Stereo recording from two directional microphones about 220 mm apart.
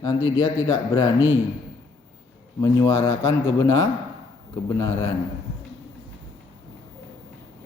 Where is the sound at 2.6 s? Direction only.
15° left (ahead or behind).